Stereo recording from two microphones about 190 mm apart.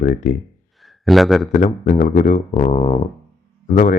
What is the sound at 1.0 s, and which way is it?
Speech, centre (ahead or behind).